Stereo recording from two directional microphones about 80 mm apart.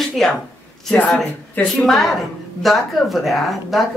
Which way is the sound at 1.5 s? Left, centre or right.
Left.